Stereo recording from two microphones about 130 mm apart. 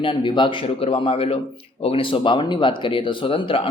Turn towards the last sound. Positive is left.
turn(degrees=40)  # may be behind; listen again after turning